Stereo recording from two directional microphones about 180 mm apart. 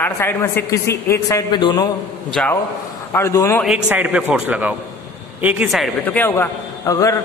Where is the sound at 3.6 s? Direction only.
5° right (ahead or behind).